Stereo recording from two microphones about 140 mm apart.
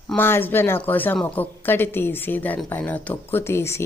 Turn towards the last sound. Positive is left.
turn(degrees=20)  # may be behind; listen again after turning